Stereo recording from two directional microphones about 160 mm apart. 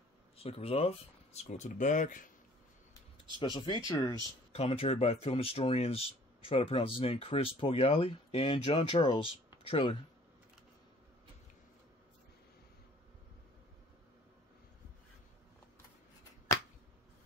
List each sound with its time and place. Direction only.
0.4 s speech: 40° left (ahead or behind); by 2.2 s 55° left (ahead or behind)
3.3 s speech: 30° left (ahead or behind)
4.5 s speech: 40° left (ahead or behind)